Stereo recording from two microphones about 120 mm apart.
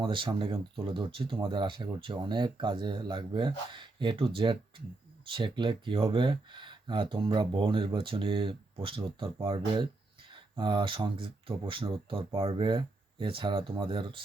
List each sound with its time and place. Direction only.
0.0 s speech: 45° right (ahead or behind)